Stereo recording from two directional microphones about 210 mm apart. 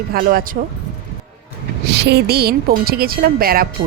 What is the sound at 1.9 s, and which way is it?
Speech, 55° right (ahead or behind).